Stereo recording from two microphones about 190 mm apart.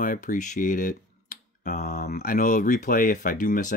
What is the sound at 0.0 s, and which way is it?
Speech, 45° left (ahead or behind).